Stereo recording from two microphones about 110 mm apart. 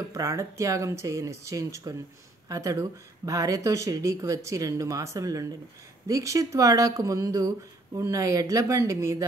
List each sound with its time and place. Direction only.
0.1 s speech: 30° right (ahead or behind)